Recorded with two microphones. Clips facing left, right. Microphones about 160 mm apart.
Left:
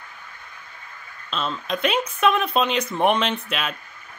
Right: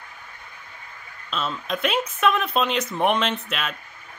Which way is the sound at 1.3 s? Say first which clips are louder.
Left 1 dB; 5° right (ahead or behind).